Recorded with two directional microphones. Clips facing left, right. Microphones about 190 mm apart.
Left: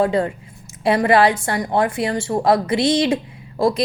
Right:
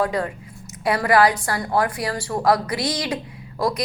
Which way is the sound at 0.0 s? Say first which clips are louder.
Left 5 dB; 25° left (ahead or behind).